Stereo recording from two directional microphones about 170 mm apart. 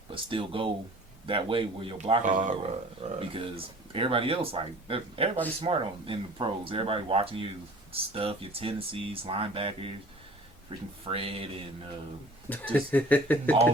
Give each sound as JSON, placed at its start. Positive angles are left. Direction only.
{"t": 0.1, "sound": "speech", "side_deg": -30}
{"t": 2.2, "sound": "speech", "side_deg": -45}
{"t": 12.5, "sound": "speech", "side_deg": 10}